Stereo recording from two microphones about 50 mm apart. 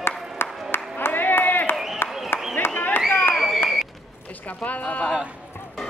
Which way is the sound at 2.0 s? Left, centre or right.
Centre.